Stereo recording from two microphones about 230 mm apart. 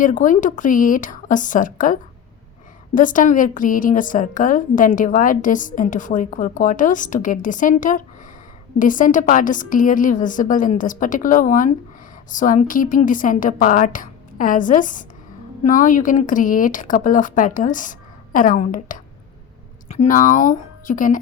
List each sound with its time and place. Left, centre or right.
0.0 s a woman's voice: left